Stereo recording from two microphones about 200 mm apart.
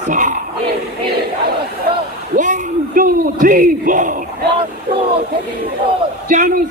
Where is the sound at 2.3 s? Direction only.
40° right (ahead or behind).